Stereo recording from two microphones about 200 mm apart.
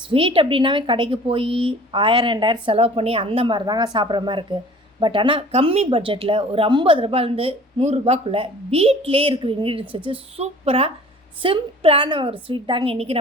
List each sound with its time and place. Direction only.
0.1 s speech: 25° right (ahead or behind)